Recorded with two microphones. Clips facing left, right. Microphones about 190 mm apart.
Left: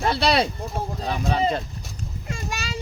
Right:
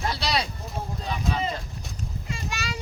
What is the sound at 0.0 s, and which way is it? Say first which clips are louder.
Speech: left 7 dB; 60° left (ahead or behind).